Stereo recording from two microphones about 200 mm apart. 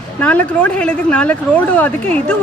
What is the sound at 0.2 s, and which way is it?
A woman's voice, 5° left (ahead or behind).